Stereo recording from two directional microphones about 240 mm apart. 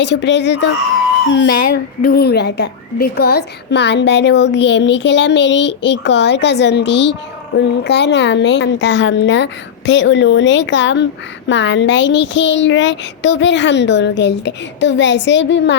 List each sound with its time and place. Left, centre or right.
0.0 s a woman's voice: left
2.0 s a woman's voice: left